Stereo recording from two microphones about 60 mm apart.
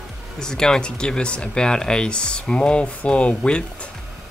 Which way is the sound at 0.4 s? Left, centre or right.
Centre.